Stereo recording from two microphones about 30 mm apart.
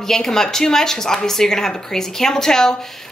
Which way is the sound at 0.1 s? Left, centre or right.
Centre.